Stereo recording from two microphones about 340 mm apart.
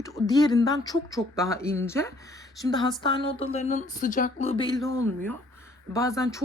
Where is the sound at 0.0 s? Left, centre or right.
Centre.